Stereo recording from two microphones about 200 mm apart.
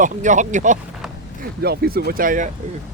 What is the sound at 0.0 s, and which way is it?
Speech, 40° right (ahead or behind).